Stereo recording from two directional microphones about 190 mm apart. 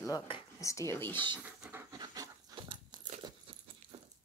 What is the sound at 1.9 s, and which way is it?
Dog, 20° right (ahead or behind).